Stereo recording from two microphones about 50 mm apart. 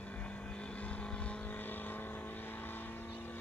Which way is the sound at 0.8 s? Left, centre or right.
Left.